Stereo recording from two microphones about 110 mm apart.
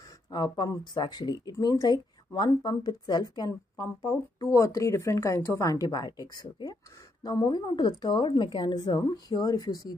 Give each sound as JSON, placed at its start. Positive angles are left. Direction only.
{"t": 0.3, "sound": "speech", "side_deg": 40}